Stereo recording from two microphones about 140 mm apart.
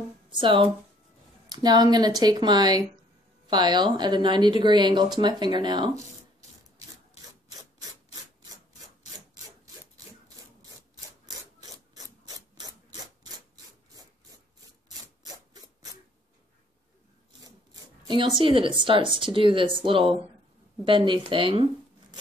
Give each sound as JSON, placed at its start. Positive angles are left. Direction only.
{"t": 0.3, "sound": "speech", "side_deg": -35}
{"t": 11.2, "sound": "rub", "side_deg": -25}
{"t": 15.2, "sound": "rub", "side_deg": -25}
{"t": 18.0, "sound": "speech", "side_deg": -35}